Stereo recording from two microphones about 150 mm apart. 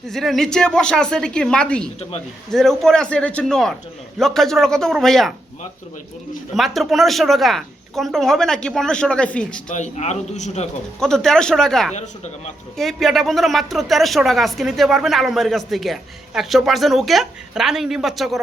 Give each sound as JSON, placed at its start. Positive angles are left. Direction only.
{"t": 0.1, "sound": "speech", "side_deg": 0}
{"t": 6.5, "sound": "speech", "side_deg": 0}
{"t": 9.7, "sound": "a man's voice", "side_deg": 50}
{"t": 11.0, "sound": "speech", "side_deg": 5}
{"t": 11.9, "sound": "a man's voice", "side_deg": 50}
{"t": 12.7, "sound": "speech", "side_deg": 0}